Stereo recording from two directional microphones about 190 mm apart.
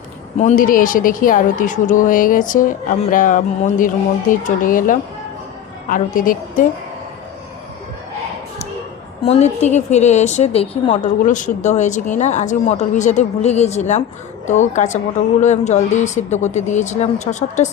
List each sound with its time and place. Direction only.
0.3 s a woman's voice: 40° left (ahead or behind)
9.2 s a woman's voice: 35° left (ahead or behind)
11.2 s a woman's voice: 40° left (ahead or behind)